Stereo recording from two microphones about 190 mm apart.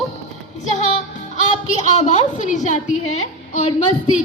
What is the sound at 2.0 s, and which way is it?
Speech, 40° left (ahead or behind).